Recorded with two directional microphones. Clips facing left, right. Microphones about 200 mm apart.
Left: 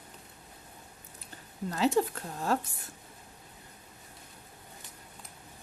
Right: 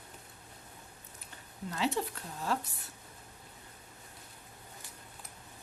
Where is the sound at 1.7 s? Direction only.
45° left (ahead or behind).